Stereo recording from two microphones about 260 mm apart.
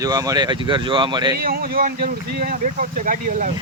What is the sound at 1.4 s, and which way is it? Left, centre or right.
Speech, right.